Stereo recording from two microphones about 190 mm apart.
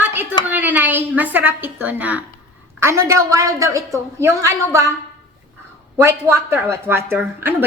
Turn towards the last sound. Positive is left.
turn(degrees=-10)  # may be behind; listen again after turning